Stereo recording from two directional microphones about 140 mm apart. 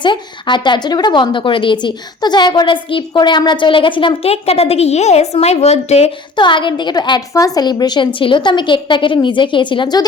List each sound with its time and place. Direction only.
0.0 s a woman's voice: 35° left (ahead or behind); by 6.1 s 50° left (ahead or behind)
6.3 s a woman's voice: 35° left (ahead or behind)